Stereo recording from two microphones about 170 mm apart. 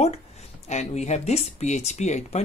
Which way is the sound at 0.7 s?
40° left (ahead or behind).